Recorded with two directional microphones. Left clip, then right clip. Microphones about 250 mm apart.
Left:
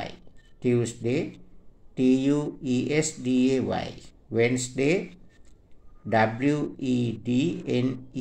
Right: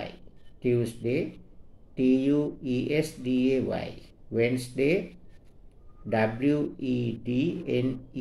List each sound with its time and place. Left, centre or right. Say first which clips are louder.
0.6 s speech: left 1 dB; centre
6.0 s speech: left 3 dB; centre